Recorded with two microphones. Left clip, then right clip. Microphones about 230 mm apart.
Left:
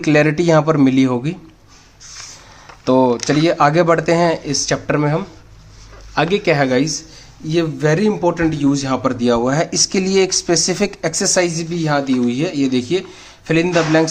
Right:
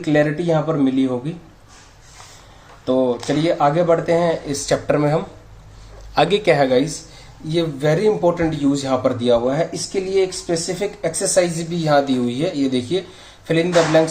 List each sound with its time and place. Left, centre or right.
0.0 s a man's voice: left
2.8 s a man's voice: left